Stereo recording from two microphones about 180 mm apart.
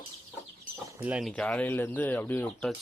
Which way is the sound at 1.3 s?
5° left (ahead or behind).